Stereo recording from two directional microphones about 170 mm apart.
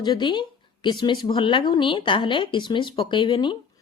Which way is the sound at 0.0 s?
25° left (ahead or behind).